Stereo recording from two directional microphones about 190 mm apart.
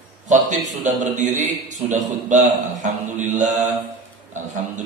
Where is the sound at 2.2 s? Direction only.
40° right (ahead or behind).